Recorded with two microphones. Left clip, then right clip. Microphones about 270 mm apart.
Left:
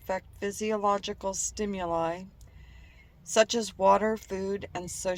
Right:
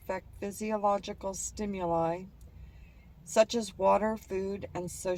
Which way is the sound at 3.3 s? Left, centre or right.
Centre.